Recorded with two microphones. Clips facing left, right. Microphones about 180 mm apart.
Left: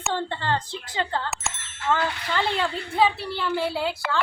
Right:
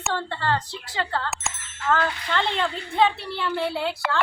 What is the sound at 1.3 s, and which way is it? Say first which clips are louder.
Speech: even; centre (ahead or behind).